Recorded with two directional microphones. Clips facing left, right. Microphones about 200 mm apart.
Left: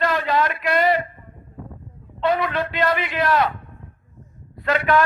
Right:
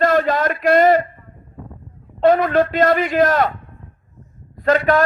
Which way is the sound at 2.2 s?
45° right (ahead or behind).